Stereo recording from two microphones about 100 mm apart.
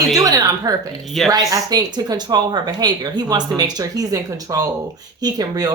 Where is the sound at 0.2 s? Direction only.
35° right (ahead or behind).